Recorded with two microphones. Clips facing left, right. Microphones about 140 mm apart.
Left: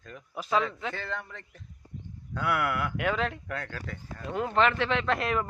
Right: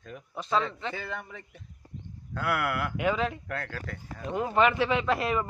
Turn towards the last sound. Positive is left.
turn(degrees=0)  # may be behind; listen again after turning